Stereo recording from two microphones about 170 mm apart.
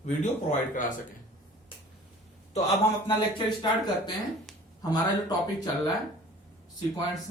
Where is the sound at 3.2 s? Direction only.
25° left (ahead or behind).